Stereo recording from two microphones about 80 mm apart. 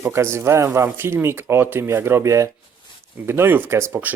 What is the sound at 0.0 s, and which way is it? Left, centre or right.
Speech, right.